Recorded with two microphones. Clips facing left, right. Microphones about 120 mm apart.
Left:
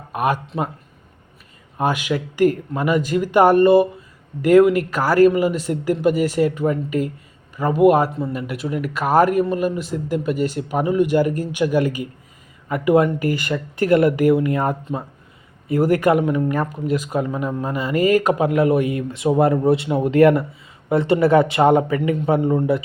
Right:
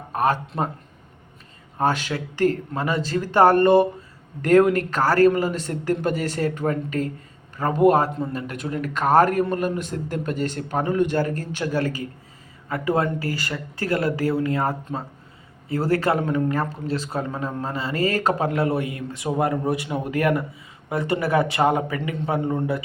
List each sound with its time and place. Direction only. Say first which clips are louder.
0.1 s speech: left 1 dB; 15° left (ahead or behind)
0.4 s speech: left 1 dB; centre (ahead or behind)
1.8 s speech: left 2 dB; 15° left (ahead or behind)
18.6 s a man's voice: left 8 dB; 30° right (ahead or behind)
18.9 s speech: left 7 dB; 20° left (ahead or behind)